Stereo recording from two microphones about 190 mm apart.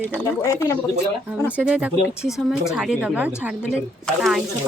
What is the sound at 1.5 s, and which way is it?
A woman's voice, 5° right (ahead or behind).